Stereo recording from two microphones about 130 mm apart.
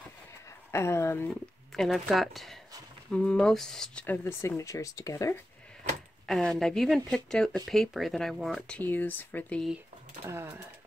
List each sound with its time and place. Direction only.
0.7 s speech: 20° left (ahead or behind)
1.8 s speech: centre (ahead or behind); by 5.3 s 25° left (ahead or behind)
6.2 s speech: 5° left (ahead or behind)
10.2 s speech: 20° right (ahead or behind)